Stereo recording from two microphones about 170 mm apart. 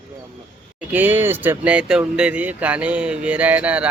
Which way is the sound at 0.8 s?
10° right (ahead or behind).